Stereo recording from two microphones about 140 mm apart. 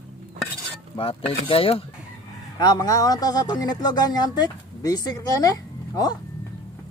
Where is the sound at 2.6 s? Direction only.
30° left (ahead or behind).